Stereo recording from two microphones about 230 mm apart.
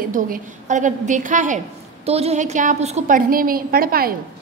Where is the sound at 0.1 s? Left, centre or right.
Right.